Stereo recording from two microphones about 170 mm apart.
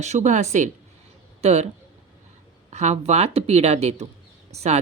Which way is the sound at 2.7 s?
40° right (ahead or behind).